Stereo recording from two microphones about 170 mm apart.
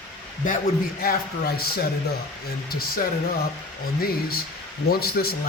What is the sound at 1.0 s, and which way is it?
Speech, 60° left (ahead or behind).